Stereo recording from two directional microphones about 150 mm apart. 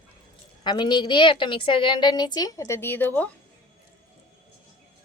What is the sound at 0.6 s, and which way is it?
A woman's voice, 30° left (ahead or behind).